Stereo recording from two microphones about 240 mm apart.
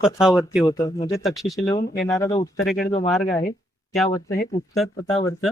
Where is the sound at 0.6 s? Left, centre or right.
Centre.